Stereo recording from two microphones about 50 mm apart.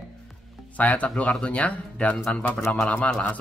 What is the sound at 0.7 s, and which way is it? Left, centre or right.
Speech, left.